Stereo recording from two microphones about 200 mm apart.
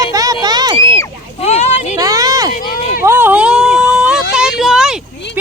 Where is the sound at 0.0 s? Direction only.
15° right (ahead or behind).